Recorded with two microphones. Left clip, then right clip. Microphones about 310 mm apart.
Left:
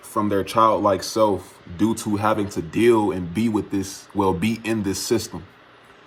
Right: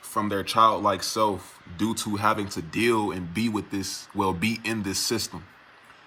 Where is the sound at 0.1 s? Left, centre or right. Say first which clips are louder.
Left 4 dB; centre.